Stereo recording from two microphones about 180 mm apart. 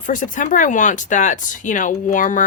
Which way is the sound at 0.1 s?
45° left (ahead or behind).